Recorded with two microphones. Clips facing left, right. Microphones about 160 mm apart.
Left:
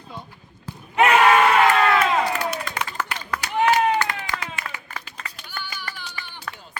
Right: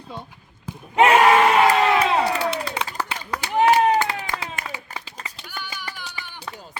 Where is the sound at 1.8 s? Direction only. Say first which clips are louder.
Even; 15° right (ahead or behind).